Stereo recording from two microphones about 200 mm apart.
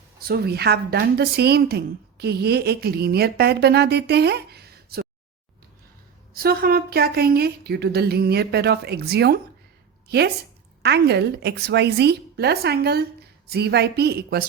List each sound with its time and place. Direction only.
0.2 s a woman's voice: 50° right (ahead or behind)
6.3 s a woman's voice: 50° right (ahead or behind)